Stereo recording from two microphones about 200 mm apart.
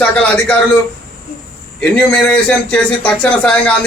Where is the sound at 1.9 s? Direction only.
5° left (ahead or behind).